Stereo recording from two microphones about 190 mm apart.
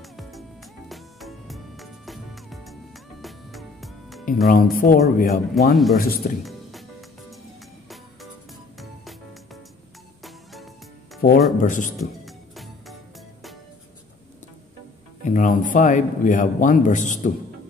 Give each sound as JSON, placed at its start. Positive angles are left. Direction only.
{"t": 0.0, "sound": "music", "side_deg": 0}
{"t": 4.5, "sound": "speech", "side_deg": 45}
{"t": 5.5, "sound": "speech", "side_deg": 0}
{"t": 5.9, "sound": "speech", "side_deg": 50}
{"t": 6.4, "sound": "music", "side_deg": 0}
{"t": 8.7, "sound": "music", "side_deg": 0}
{"t": 11.1, "sound": "speech", "side_deg": 55}
{"t": 11.6, "sound": "speech", "side_deg": 45}
{"t": 12.3, "sound": "music", "side_deg": 0}
{"t": 15.2, "sound": "speech", "side_deg": 45}